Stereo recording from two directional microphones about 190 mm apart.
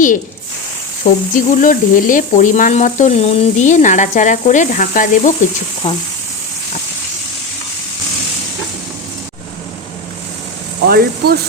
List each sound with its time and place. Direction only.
1.0 s speech: 45° left (ahead or behind)
10.8 s speech: 55° right (ahead or behind)